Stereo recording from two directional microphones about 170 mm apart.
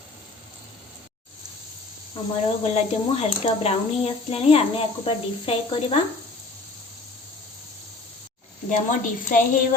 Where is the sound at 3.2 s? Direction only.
35° left (ahead or behind).